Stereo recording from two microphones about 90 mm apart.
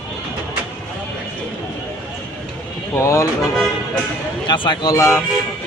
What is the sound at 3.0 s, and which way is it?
Speech, 35° left (ahead or behind).